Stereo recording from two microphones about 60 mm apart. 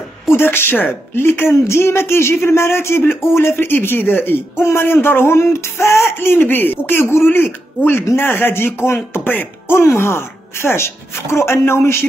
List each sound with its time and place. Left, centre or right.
0.3 s a man's voice: left
6.1 s a man's voice: left